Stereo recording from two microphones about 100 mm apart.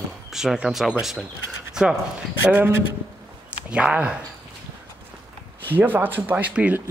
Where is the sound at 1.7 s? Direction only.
5° right (ahead or behind).